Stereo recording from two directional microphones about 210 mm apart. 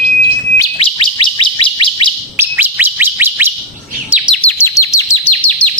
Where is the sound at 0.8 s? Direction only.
25° left (ahead or behind).